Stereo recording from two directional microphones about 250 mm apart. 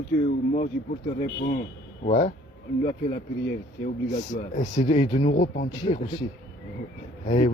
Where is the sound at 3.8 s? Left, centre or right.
Left.